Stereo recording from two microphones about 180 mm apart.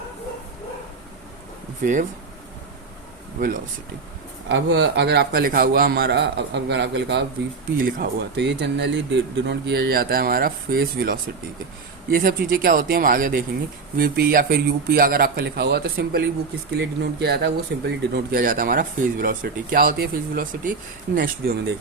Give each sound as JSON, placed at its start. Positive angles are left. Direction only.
{"t": 1.8, "sound": "speech", "side_deg": -45}
{"t": 4.4, "sound": "speech", "side_deg": -75}
{"t": 7.8, "sound": "speech", "side_deg": -55}
{"t": 8.4, "sound": "speech", "side_deg": -80}
{"t": 21.2, "sound": "speech", "side_deg": -60}